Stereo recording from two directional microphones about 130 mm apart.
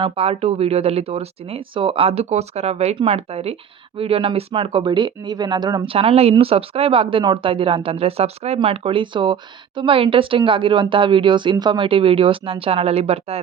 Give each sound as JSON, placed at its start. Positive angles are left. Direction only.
{"t": 0.0, "sound": "a woman's voice", "side_deg": -50}
{"t": 5.9, "sound": "a woman's voice", "side_deg": -45}